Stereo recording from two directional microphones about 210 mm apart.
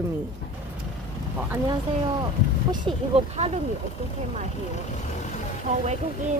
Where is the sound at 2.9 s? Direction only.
25° right (ahead or behind).